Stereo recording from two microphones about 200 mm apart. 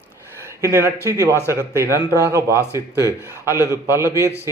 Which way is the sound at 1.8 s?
15° left (ahead or behind).